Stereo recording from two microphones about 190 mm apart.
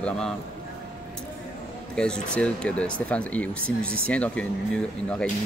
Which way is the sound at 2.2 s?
5° left (ahead or behind).